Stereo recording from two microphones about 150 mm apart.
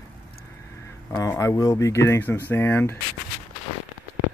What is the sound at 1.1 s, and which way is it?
Speech, 20° left (ahead or behind).